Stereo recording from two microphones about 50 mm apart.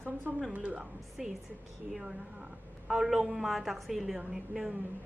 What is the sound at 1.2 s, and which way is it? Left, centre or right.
A woman's voice, centre.